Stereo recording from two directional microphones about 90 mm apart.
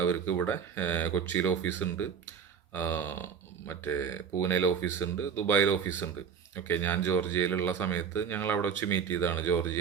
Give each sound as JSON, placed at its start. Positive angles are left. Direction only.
{"t": 0.0, "sound": "speech", "side_deg": 25}